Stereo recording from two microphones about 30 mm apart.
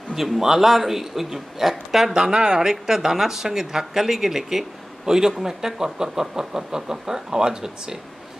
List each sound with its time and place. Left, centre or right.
0.1 s speech: centre
2.1 s a man's voice: right